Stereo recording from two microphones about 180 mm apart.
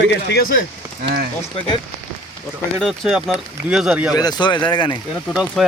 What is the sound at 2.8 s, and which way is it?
Speech, centre (ahead or behind).